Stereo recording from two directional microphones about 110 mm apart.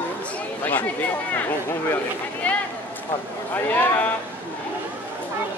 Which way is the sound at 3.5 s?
15° left (ahead or behind).